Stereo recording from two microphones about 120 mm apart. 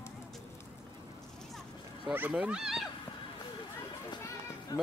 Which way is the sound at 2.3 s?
5° right (ahead or behind).